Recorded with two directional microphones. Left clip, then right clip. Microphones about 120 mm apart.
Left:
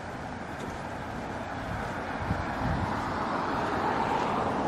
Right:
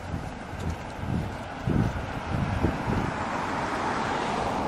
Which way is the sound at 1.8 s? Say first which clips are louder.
Right 1 dB; 20° right (ahead or behind).